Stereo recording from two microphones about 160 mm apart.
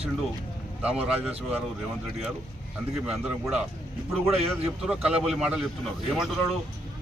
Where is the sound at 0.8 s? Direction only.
5° right (ahead or behind).